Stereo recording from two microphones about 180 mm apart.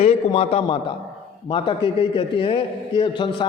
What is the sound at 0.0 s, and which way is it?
A man's voice, 35° left (ahead or behind).